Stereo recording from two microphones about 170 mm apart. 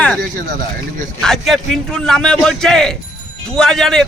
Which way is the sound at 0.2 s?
50° right (ahead or behind).